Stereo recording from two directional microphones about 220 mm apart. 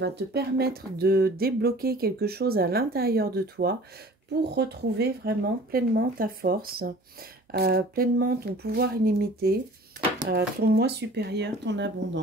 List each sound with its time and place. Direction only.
0.0 s speech: 50° right (ahead or behind)